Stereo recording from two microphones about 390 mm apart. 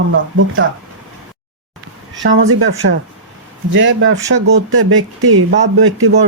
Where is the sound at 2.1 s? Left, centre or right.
Right.